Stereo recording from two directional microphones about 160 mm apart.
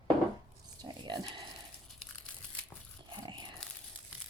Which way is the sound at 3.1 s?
25° right (ahead or behind).